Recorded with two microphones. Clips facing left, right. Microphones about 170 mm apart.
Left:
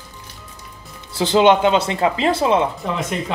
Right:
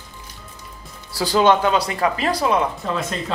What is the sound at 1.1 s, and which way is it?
A woman's voice, 20° left (ahead or behind).